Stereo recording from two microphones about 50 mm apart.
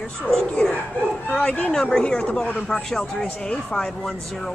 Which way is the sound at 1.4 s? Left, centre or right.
Left.